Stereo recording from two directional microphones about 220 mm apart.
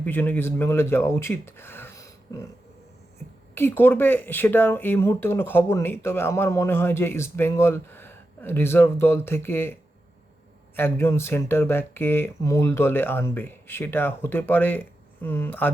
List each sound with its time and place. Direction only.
0.0 s speech: 10° left (ahead or behind)
3.5 s speech: 10° left (ahead or behind)
10.8 s speech: 10° left (ahead or behind)